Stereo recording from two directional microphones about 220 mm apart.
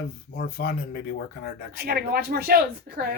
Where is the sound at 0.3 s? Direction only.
45° left (ahead or behind).